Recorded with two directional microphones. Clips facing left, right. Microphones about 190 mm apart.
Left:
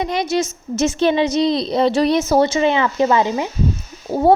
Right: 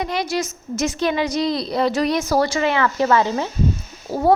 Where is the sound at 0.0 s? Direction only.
20° left (ahead or behind).